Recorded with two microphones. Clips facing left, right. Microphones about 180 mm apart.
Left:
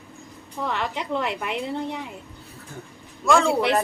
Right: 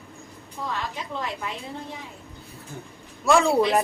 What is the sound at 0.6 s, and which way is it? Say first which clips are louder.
A woman's voice: left 4 dB; 70° left (ahead or behind).